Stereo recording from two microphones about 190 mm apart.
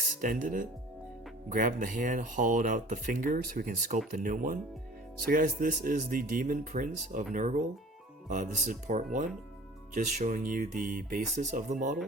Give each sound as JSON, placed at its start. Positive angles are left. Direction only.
{"t": 0.2, "sound": "speech", "side_deg": -45}